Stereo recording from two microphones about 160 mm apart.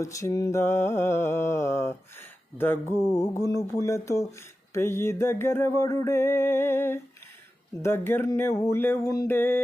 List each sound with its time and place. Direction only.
0.0 s music: 20° left (ahead or behind)
2.6 s speech: 15° left (ahead or behind)
4.7 s music: 15° left (ahead or behind)